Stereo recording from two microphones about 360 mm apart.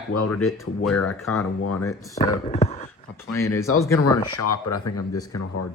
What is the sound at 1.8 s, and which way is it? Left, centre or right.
Speech, centre.